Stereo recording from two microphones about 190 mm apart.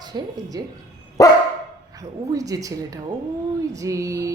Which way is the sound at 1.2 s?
15° left (ahead or behind).